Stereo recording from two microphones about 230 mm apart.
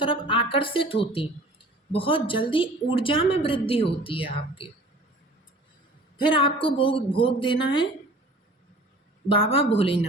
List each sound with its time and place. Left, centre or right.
0.0 s a woman's voice: left
6.1 s a woman's voice: left
9.3 s a woman's voice: left